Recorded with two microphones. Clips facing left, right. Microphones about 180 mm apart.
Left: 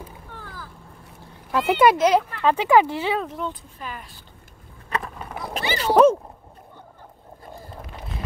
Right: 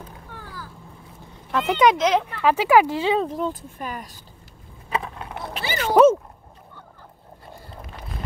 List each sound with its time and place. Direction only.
0.3 s vehicle: 10° right (ahead or behind)
1.5 s speech: 10° left (ahead or behind)
2.3 s speech: 10° right (ahead or behind)
3.2 s speech: 35° right (ahead or behind)
4.8 s vehicle: 5° right (ahead or behind)
5.5 s a sound: 45° left (ahead or behind)